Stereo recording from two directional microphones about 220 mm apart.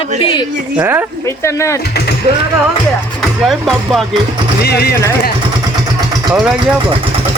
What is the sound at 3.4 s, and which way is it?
Speech, centre (ahead or behind).